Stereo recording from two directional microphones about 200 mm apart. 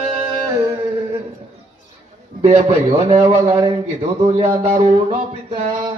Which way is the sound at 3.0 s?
30° right (ahead or behind).